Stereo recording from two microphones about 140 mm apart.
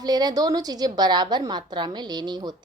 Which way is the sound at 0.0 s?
30° right (ahead or behind).